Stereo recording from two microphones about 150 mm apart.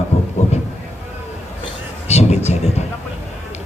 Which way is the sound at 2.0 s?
45° left (ahead or behind).